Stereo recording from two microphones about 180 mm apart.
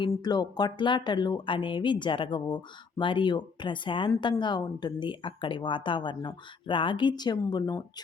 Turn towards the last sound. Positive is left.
turn(degrees=20)  # may be behind; listen again after turning